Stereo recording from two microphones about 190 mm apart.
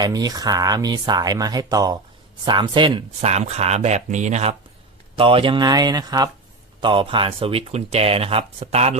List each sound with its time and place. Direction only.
0.0 s speech: 20° right (ahead or behind)
3.2 s speech: 35° right (ahead or behind)